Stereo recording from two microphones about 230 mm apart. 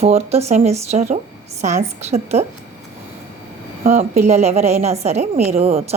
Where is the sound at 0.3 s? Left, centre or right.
Right.